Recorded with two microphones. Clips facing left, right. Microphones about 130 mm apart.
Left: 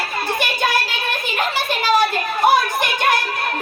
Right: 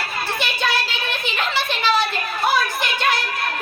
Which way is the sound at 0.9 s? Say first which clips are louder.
Left 2 dB; 45° left (ahead or behind).